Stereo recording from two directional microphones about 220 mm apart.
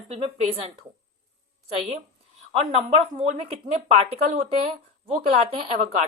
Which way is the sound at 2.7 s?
25° right (ahead or behind).